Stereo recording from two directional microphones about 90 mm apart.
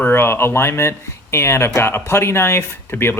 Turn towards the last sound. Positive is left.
turn(degrees=25)  # may be behind; listen again after turning